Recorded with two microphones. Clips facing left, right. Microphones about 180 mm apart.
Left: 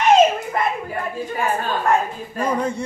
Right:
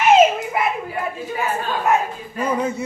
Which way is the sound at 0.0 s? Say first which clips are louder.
Right 1 dB; 5° right (ahead or behind).